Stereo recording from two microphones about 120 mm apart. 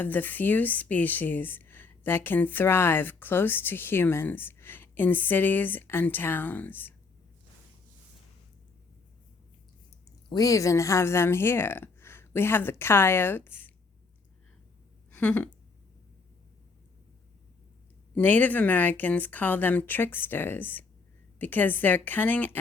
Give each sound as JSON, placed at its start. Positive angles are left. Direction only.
{"t": 0.0, "sound": "a woman's voice", "side_deg": 15}
{"t": 10.2, "sound": "speech", "side_deg": 30}
{"t": 15.1, "sound": "speech", "side_deg": 10}
{"t": 18.1, "sound": "a woman's voice", "side_deg": 15}